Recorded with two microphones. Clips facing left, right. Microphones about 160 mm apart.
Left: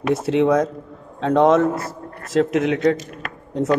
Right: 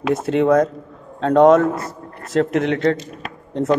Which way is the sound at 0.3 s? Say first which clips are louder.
Right 2 dB; 5° left (ahead or behind).